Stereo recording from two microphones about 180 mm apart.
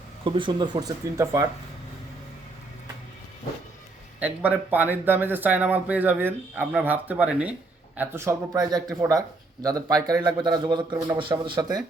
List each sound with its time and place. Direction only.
0.3 s speech: 25° right (ahead or behind)
4.2 s speech: 10° right (ahead or behind); by 11.8 s 25° right (ahead or behind)